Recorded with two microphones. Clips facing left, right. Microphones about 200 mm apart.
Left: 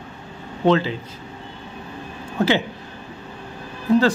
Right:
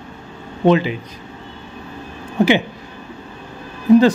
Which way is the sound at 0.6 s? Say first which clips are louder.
Right 3 dB; 15° right (ahead or behind).